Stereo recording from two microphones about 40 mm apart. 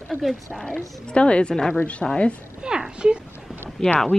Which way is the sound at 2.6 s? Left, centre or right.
Centre.